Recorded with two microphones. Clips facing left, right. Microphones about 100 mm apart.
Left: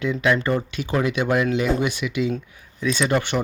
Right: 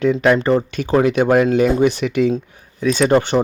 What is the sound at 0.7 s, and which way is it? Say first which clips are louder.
Speech: right 7 dB; 45° right (ahead or behind).